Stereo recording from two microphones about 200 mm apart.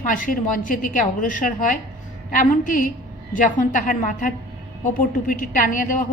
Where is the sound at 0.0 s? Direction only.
40° left (ahead or behind).